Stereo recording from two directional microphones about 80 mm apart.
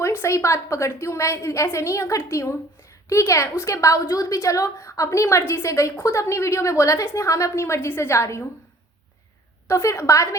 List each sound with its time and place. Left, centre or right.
0.0 s a woman's voice: left
9.6 s a woman's voice: left